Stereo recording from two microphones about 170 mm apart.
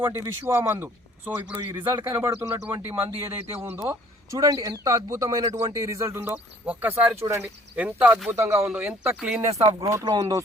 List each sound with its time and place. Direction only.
0.0 s a man's voice: 15° right (ahead or behind)
3.1 s a man's voice: 35° right (ahead or behind)
3.6 s a man's voice: 15° right (ahead or behind)
9.8 s speech: 20° right (ahead or behind)